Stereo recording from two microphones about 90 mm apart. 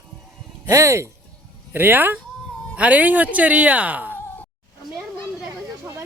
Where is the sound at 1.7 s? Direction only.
20° right (ahead or behind).